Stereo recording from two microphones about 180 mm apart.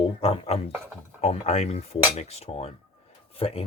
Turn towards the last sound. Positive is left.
turn(degrees=30)  # may be behind; listen again after turning